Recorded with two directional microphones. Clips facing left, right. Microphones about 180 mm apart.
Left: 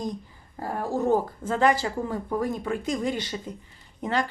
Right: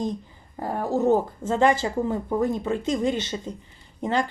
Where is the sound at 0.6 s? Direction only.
20° right (ahead or behind).